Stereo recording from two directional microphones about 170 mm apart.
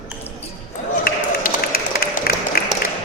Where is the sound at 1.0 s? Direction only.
60° left (ahead or behind).